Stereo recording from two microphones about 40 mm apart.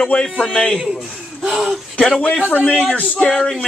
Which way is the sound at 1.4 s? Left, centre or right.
Centre.